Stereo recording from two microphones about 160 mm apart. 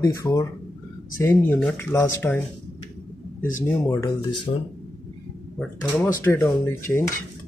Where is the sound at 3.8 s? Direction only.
25° left (ahead or behind).